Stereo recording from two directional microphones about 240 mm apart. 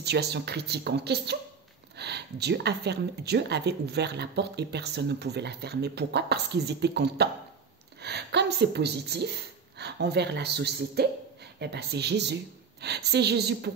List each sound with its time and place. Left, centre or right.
0.0 s speech: right